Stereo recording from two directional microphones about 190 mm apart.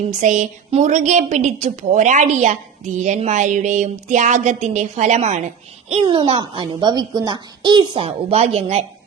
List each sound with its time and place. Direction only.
0.1 s a woman's voice: 40° right (ahead or behind)